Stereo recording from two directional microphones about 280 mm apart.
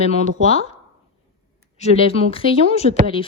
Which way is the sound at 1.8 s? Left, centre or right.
Left.